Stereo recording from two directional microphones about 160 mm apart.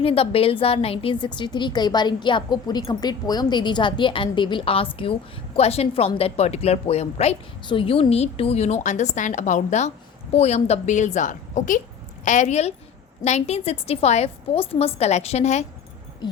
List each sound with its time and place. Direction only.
0.0 s a woman's voice: 35° left (ahead or behind)
16.2 s a woman's voice: 30° left (ahead or behind)